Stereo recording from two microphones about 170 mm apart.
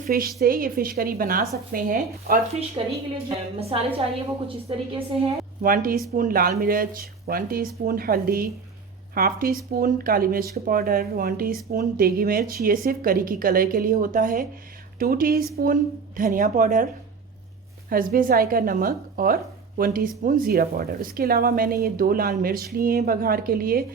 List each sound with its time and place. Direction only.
0.0 s speech: 60° right (ahead or behind)
2.8 s a woman's voice: 30° right (ahead or behind)
5.6 s a woman's voice: 55° right (ahead or behind)